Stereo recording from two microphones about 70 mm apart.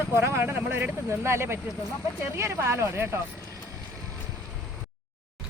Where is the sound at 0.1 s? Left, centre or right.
Right.